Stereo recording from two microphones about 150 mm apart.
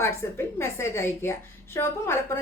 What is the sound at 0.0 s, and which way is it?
A woman's voice, 15° left (ahead or behind).